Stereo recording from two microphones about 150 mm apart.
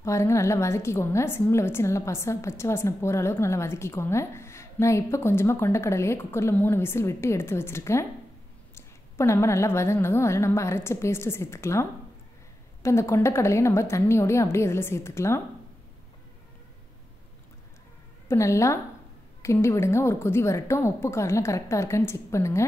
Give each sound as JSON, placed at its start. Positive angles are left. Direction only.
{"t": 0.0, "sound": "a woman's voice", "side_deg": 20}
{"t": 18.3, "sound": "a woman's voice", "side_deg": 20}